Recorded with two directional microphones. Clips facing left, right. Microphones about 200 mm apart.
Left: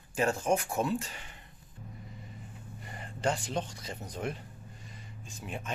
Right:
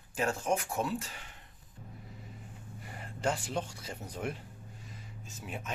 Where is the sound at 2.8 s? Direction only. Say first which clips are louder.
Left 1 dB; 5° right (ahead or behind).